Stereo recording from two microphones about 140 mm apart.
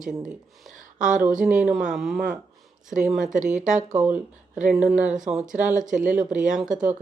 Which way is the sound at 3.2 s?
65° right (ahead or behind).